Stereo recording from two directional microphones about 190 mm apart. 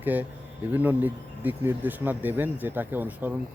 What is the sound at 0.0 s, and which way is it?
Speech, 10° right (ahead or behind).